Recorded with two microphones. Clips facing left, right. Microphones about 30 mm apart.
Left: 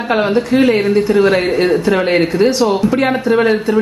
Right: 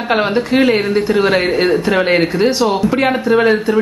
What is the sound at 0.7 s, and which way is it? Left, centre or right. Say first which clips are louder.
Speech: left 1 dB; centre.